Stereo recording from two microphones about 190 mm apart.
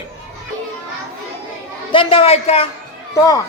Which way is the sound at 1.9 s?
25° left (ahead or behind).